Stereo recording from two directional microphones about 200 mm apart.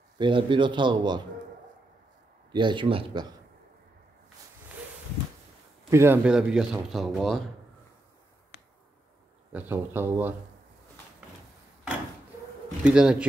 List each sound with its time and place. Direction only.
0.2 s a man's voice: 25° right (ahead or behind)
2.5 s a man's voice: 25° right (ahead or behind)
5.9 s speech: 10° right (ahead or behind)
9.5 s speech: 10° right (ahead or behind)
12.8 s speech: 5° right (ahead or behind)